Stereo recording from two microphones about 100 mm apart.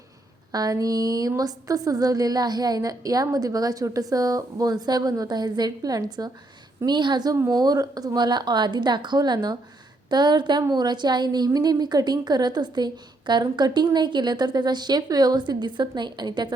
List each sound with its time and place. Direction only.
0.5 s a woman's voice: 40° right (ahead or behind)